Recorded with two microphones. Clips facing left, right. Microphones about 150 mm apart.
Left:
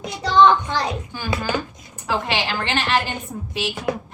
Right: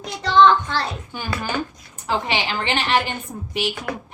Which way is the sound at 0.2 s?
10° left (ahead or behind).